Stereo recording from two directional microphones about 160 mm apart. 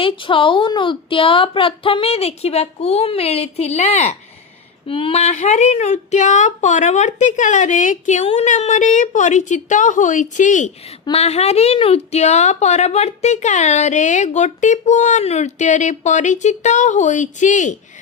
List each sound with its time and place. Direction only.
0.0 s a woman's voice: 30° left (ahead or behind)
4.9 s speech: 35° left (ahead or behind); by 10.7 s 50° left (ahead or behind)
11.0 s a woman's voice: 40° left (ahead or behind)